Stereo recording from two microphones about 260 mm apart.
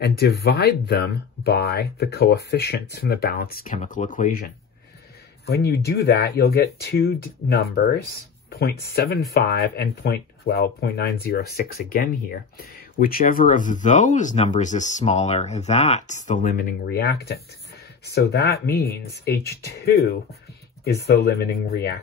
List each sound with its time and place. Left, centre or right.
0.0 s speech: left
5.5 s speech: left